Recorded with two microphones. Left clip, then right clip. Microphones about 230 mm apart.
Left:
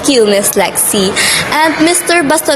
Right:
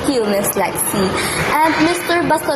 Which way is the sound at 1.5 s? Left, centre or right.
Left.